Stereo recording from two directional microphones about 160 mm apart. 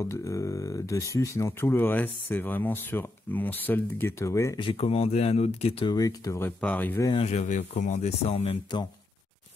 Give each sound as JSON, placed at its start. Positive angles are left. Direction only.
{"t": 0.0, "sound": "speech", "side_deg": 20}
{"t": 4.6, "sound": "speech", "side_deg": 35}
{"t": 5.9, "sound": "speech", "side_deg": 20}
{"t": 6.6, "sound": "speech", "side_deg": 10}
{"t": 7.1, "sound": "speech", "side_deg": 40}